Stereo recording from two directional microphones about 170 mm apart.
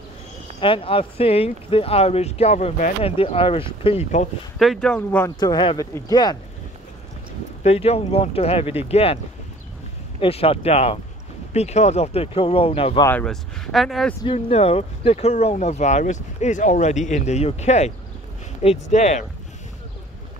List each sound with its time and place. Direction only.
0.6 s speech: 30° left (ahead or behind)
4.6 s speech: centre (ahead or behind)
5.4 s speech: 25° left (ahead or behind)
7.6 s speech: 35° left (ahead or behind)
10.2 s speech: 35° left (ahead or behind)
13.0 s speech: 10° left (ahead or behind)
14.2 s speech: 35° left (ahead or behind)